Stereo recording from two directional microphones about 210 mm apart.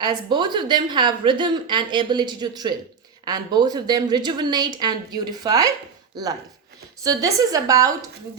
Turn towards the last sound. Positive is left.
turn(degrees=-15)  # may be behind; listen again after turning